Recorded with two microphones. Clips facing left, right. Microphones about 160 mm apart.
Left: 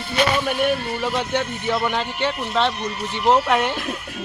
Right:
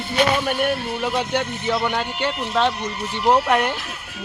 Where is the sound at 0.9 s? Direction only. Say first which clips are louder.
Even; 15° right (ahead or behind).